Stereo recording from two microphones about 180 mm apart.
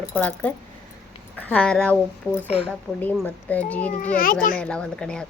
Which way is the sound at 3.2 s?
10° left (ahead or behind).